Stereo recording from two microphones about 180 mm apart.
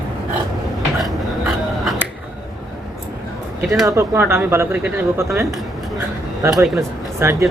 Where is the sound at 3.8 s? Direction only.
15° right (ahead or behind).